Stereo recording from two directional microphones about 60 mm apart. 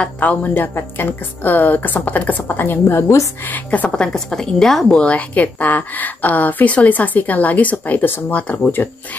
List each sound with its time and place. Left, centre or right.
0.2 s a woman's voice: left
3.9 s a woman's voice: centre
5.1 s a woman's voice: left